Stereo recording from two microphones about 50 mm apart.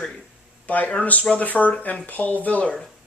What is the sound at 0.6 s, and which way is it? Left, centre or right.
Speech, left.